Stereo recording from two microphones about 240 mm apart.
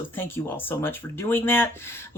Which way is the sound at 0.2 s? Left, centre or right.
Centre.